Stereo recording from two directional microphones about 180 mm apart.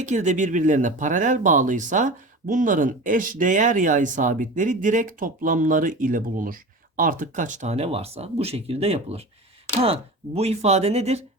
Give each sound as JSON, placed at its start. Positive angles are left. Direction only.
{"t": 0.0, "sound": "speech", "side_deg": -40}